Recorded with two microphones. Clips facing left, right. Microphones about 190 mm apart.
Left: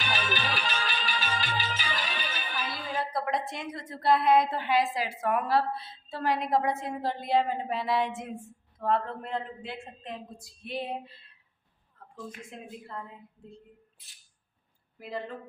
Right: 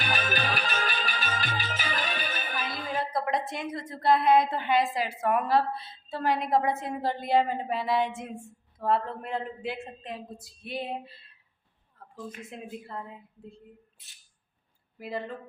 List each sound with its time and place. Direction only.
0.0 s music: 45° right (ahead or behind)
2.9 s a woman's voice: centre (ahead or behind)
12.5 s a woman's voice: 10° right (ahead or behind)
14.9 s speech: 5° right (ahead or behind)